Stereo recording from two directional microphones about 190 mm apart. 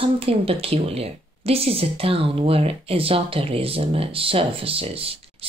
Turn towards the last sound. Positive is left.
turn(degrees=-30)  # may be behind; listen again after turning